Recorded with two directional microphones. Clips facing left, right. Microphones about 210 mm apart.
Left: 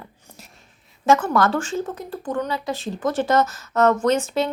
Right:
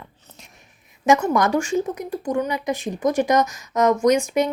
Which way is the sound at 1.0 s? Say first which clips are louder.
Even; 15° right (ahead or behind).